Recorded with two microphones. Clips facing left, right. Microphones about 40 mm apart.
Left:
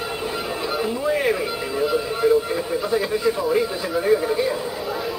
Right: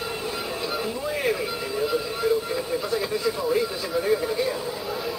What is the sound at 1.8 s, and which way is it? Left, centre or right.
Radio, centre.